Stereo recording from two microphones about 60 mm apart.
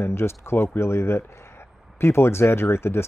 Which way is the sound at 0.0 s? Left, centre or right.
Left.